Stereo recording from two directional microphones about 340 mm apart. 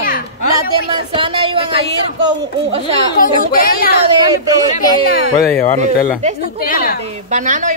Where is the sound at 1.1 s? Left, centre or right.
Centre.